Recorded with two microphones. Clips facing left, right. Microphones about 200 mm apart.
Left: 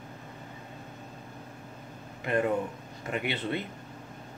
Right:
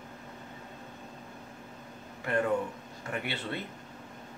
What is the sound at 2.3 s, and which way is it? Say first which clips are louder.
Speech: left 1 dB; 20° left (ahead or behind).